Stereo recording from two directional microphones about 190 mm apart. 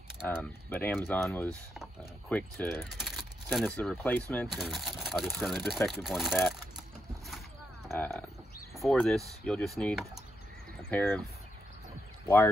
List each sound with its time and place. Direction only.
0.3 s speech: 10° left (ahead or behind)
4.5 s speech: centre (ahead or behind)
7.9 s speech: 5° left (ahead or behind)